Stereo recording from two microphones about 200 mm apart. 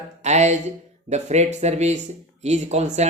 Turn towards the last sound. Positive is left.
turn(degrees=-35)  # may be behind; listen again after turning